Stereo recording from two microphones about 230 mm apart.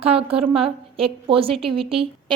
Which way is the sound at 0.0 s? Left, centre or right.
Right.